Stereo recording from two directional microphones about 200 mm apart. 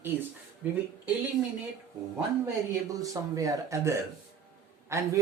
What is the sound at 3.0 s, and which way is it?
Speech, 15° right (ahead or behind).